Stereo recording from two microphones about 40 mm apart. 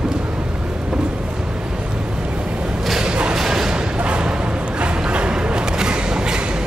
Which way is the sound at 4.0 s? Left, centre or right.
Right.